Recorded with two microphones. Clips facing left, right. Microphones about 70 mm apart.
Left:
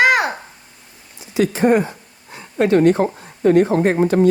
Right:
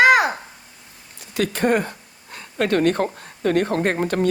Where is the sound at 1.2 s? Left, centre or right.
Right.